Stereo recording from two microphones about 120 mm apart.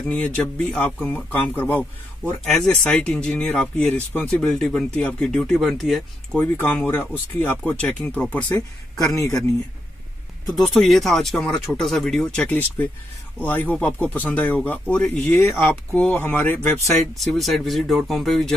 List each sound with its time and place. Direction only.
0.0 s speech: 5° left (ahead or behind)
2.4 s speech: 5° left (ahead or behind)
6.3 s speech: 20° left (ahead or behind)
10.5 s speech: 5° left (ahead or behind)
15.2 s speech: 20° left (ahead or behind)
17.1 s speech: centre (ahead or behind)